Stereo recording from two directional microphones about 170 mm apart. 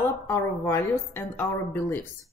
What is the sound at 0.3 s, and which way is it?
A woman's voice, 15° left (ahead or behind).